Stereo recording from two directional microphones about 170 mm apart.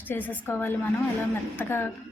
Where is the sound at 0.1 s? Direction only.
10° left (ahead or behind).